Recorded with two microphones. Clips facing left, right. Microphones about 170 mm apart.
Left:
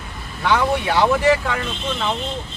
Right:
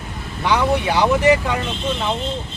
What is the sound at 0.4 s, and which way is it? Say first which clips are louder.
Speech: right 1 dB; 15° right (ahead or behind).